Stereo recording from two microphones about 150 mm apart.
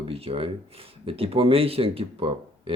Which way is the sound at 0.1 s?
40° right (ahead or behind).